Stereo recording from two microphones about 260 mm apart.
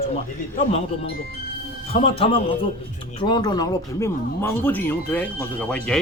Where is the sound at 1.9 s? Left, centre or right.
Left.